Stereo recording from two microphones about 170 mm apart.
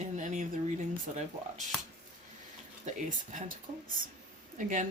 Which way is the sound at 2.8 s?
50° right (ahead or behind).